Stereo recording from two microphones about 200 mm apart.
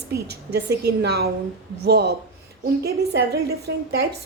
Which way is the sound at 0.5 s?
55° right (ahead or behind).